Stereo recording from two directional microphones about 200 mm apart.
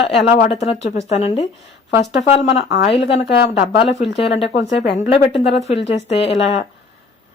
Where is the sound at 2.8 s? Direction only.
30° left (ahead or behind).